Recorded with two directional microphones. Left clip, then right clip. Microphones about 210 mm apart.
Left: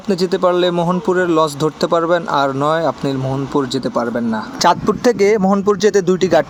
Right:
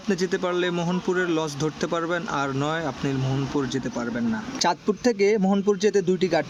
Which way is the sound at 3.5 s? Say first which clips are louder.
Left 9 dB; 20° left (ahead or behind).